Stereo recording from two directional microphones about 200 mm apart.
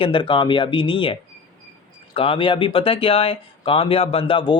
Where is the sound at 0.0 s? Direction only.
25° left (ahead or behind).